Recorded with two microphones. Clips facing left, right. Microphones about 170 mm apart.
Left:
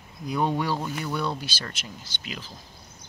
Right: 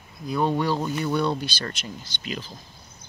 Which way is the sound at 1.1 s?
5° left (ahead or behind).